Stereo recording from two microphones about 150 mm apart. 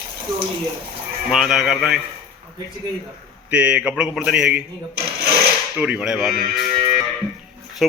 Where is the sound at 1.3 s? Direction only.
5° right (ahead or behind).